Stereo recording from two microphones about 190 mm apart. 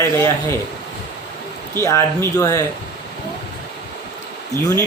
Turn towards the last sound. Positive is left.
turn(degrees=15)  # may be behind; listen again after turning